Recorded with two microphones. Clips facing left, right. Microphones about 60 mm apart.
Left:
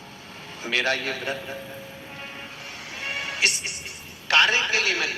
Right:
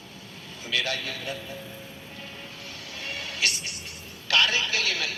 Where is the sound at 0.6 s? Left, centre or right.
Left.